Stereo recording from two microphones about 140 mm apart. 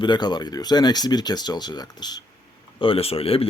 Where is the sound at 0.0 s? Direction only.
30° left (ahead or behind).